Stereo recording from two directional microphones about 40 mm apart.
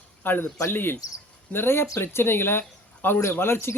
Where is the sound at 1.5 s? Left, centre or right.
Left.